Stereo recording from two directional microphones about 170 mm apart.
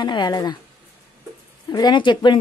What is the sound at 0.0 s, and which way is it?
Speech, 25° left (ahead or behind).